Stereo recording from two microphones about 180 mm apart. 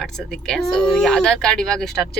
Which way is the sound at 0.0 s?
Centre (ahead or behind).